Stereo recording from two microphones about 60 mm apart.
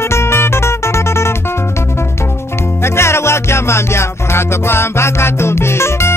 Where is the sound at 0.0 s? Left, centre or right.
Left.